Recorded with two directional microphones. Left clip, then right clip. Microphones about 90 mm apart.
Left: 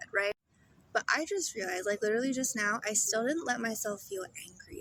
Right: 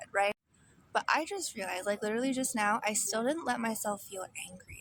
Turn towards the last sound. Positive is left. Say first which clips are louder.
# left 1 dB
turn(degrees=-35)  # may be behind; listen again after turning